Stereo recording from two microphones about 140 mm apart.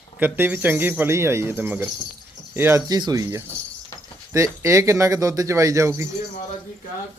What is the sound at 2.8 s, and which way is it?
Speech, 30° right (ahead or behind).